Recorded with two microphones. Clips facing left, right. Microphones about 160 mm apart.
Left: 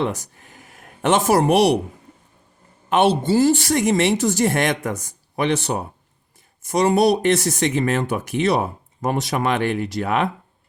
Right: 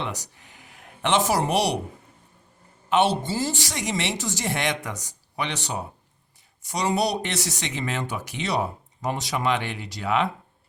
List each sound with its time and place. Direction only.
0.0 s speech: 50° left (ahead or behind)
2.9 s speech: 55° left (ahead or behind)